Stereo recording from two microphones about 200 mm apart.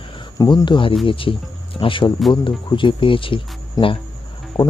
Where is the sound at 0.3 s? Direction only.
20° left (ahead or behind).